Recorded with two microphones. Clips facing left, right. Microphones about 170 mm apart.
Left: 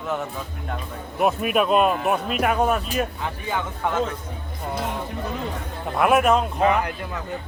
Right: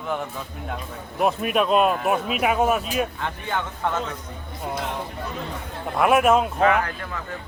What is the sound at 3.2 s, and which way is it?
Speech, 5° left (ahead or behind).